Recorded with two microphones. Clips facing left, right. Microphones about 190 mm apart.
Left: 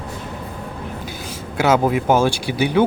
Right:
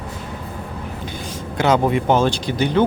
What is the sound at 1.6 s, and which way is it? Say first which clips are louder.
Speech: even; 5° left (ahead or behind).